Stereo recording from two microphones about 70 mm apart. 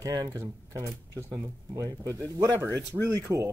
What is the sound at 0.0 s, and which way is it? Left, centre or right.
Mantra, right.